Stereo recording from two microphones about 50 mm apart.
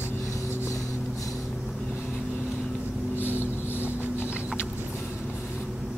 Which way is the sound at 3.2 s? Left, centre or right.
Left.